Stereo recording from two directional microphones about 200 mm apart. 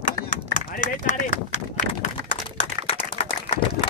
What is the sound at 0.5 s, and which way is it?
Speech, 40° left (ahead or behind).